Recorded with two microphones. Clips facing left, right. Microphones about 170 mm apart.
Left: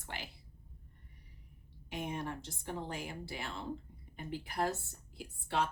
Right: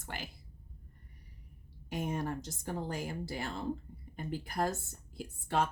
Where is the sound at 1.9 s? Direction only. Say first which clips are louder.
Right 4 dB; 40° right (ahead or behind).